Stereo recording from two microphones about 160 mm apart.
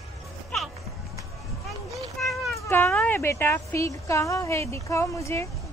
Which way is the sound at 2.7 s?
15° left (ahead or behind).